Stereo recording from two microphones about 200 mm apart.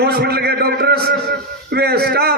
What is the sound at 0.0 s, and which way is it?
A man's voice, 55° right (ahead or behind).